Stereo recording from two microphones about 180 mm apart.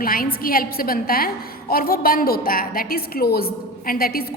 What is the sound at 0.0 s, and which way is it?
A woman's voice, 55° left (ahead or behind).